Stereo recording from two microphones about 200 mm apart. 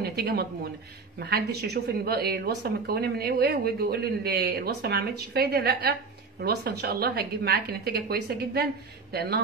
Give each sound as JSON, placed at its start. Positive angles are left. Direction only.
{"t": 0.0, "sound": "a woman's voice", "side_deg": -50}